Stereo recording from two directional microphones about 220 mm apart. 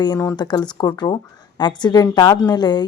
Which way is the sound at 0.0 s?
15° left (ahead or behind).